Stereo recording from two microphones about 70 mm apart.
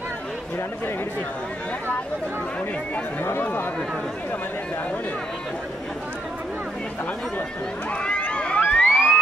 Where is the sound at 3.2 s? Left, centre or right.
Left.